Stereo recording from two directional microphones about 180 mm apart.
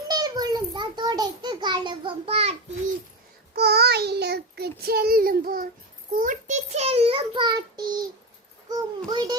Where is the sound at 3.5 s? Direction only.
60° right (ahead or behind).